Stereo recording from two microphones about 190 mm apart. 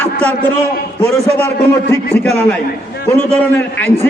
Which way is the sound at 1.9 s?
10° left (ahead or behind).